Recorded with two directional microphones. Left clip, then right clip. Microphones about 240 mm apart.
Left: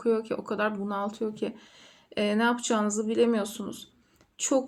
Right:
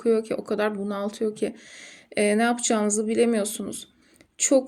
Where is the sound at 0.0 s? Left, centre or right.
Right.